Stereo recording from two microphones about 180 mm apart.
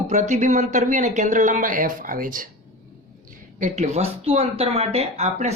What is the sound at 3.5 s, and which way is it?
Speech, 40° right (ahead or behind).